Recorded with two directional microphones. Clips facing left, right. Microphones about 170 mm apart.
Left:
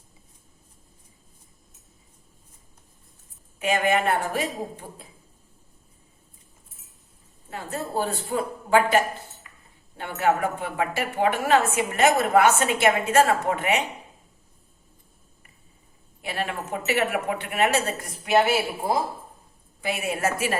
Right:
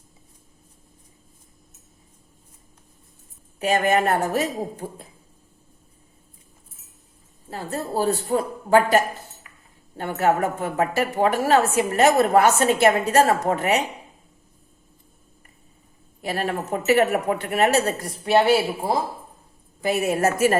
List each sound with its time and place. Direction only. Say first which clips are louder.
3.6 s a woman's voice: right 3 dB; 40° right (ahead or behind)
7.5 s a woman's voice: right 2 dB; 35° right (ahead or behind)
16.2 s a woman's voice: right 4 dB; 40° right (ahead or behind)
19.8 s a woman's voice: right 6 dB; 40° right (ahead or behind)